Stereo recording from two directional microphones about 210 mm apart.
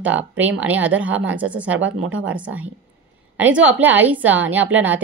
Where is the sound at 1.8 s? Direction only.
70° right (ahead or behind).